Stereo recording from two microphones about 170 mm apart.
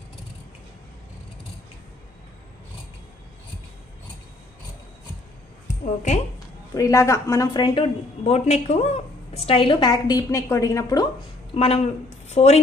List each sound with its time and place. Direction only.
6.7 s a woman's voice: 20° left (ahead or behind)
11.5 s speech: 40° left (ahead or behind)